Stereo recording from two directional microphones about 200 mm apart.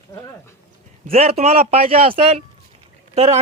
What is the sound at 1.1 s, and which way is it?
Speech, 30° right (ahead or behind).